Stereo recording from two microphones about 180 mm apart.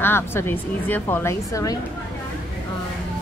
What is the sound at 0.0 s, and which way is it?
A woman's voice, 10° left (ahead or behind).